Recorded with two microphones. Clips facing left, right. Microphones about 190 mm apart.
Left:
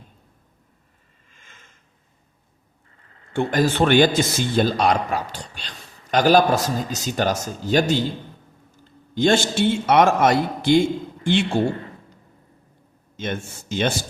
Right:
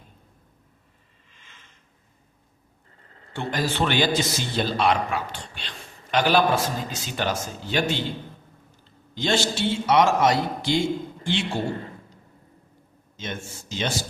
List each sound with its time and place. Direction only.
1.3 s a sound: 45° left (ahead or behind)
3.3 s a man's voice: 50° left (ahead or behind)
9.1 s a man's voice: 50° left (ahead or behind)
13.1 s speech: 55° left (ahead or behind)